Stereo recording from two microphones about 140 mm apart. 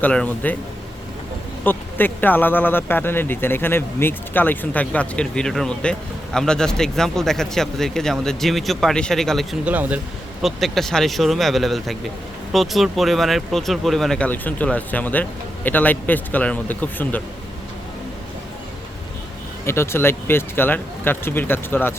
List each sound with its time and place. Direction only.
0.0 s speech: 10° left (ahead or behind)
1.6 s speech: 15° left (ahead or behind)
9.6 s speech: 10° right (ahead or behind)
10.4 s speech: centre (ahead or behind)
19.6 s speech: 20° left (ahead or behind)